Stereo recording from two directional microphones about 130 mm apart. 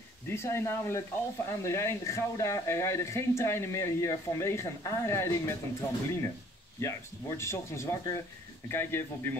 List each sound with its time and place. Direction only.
0.3 s speech: 20° left (ahead or behind)